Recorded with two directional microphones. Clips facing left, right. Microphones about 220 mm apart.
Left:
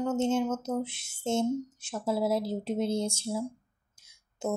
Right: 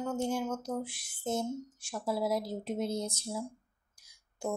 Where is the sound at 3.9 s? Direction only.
25° left (ahead or behind).